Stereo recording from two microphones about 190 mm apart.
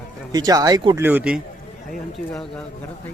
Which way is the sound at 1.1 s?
10° right (ahead or behind).